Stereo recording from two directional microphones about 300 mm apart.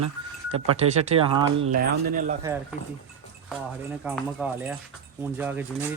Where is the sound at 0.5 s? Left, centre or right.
Right.